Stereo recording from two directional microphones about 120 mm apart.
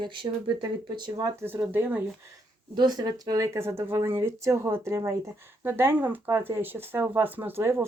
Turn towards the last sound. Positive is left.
turn(degrees=-20)  # may be behind; listen again after turning